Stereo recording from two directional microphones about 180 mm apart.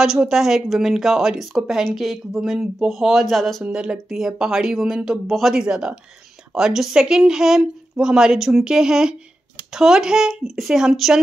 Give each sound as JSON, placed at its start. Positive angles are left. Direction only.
{"t": 0.0, "sound": "speech", "side_deg": -5}